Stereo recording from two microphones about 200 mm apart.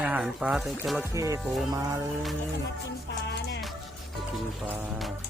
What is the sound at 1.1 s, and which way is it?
Music, 15° right (ahead or behind).